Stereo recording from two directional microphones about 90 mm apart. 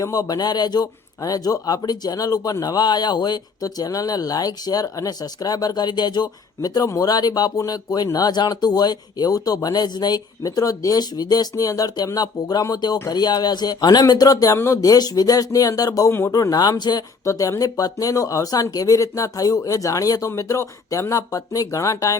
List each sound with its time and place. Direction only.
0.0 s a man's voice: 45° left (ahead or behind)
17.2 s speech: 35° left (ahead or behind)